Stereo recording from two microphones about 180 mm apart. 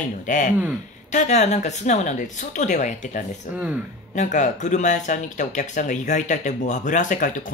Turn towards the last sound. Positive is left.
turn(degrees=45)  # may be behind; listen again after turning